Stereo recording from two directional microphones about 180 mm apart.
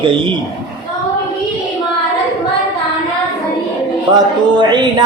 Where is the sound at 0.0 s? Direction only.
25° right (ahead or behind).